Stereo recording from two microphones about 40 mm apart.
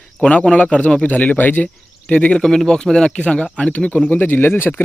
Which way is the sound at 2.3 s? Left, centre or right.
Centre.